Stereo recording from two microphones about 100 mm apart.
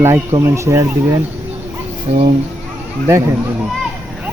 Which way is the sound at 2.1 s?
85° right.